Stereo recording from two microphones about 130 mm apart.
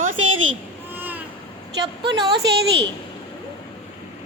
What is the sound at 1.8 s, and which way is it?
Speech, 35° right (ahead or behind).